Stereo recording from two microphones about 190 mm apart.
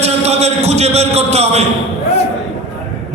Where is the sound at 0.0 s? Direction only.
35° right (ahead or behind).